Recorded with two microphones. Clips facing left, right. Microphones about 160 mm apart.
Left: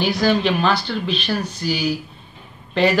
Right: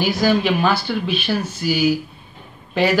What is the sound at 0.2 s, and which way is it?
A man's voice, 5° right (ahead or behind).